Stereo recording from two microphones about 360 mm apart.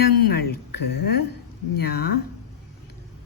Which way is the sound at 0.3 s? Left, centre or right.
Left.